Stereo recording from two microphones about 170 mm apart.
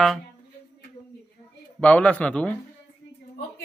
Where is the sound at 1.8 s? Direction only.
5° left (ahead or behind).